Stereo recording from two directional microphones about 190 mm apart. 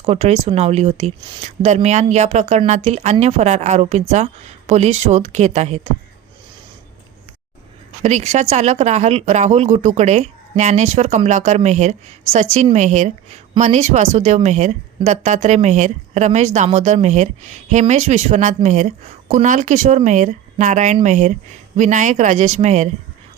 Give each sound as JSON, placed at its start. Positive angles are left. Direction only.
{"t": 0.0, "sound": "speech", "side_deg": -35}
{"t": 1.5, "sound": "speech", "side_deg": -40}
{"t": 8.0, "sound": "speech", "side_deg": -35}